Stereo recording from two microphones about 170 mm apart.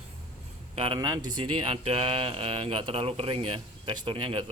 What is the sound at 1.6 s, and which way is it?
Speech, 35° right (ahead or behind).